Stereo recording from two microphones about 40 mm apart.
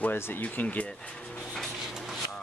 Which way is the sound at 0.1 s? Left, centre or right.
Left.